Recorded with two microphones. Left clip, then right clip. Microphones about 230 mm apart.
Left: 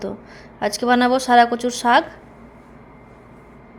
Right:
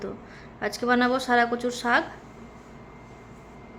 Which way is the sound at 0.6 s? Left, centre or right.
Centre.